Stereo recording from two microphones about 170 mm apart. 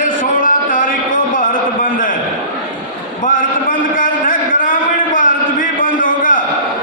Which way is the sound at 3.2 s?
50° left (ahead or behind).